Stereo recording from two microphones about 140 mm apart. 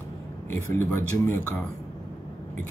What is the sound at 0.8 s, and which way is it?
Speech, 15° left (ahead or behind).